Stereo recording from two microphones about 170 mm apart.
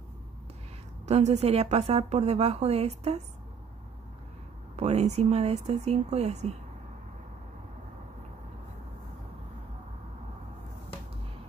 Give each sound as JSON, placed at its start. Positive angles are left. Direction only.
{"t": 1.0, "sound": "a woman's voice", "side_deg": -40}
{"t": 4.7, "sound": "a woman's voice", "side_deg": -40}